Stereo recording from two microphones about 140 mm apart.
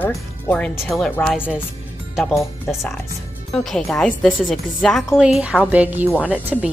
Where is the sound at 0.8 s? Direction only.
Centre (ahead or behind).